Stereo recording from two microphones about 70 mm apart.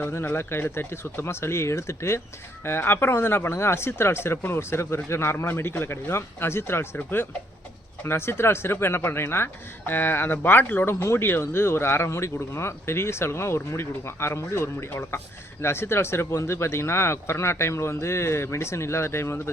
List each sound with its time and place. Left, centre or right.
0.0 s speech: left